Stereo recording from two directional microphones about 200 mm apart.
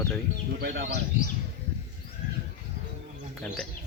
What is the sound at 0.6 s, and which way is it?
Speech, 55° right (ahead or behind).